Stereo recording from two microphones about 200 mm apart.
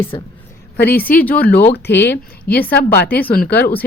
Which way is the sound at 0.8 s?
50° left (ahead or behind).